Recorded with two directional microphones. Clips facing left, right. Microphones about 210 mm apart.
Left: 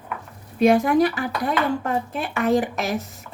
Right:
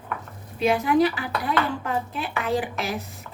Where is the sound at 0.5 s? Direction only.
45° left (ahead or behind).